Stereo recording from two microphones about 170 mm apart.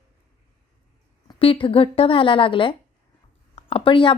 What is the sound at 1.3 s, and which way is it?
A woman's voice, 30° left (ahead or behind).